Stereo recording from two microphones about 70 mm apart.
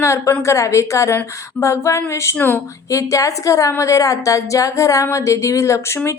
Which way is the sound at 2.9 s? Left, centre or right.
Left.